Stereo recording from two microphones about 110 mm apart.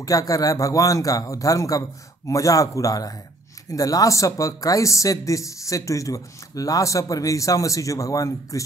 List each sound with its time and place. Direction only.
0.0 s speech: 30° left (ahead or behind)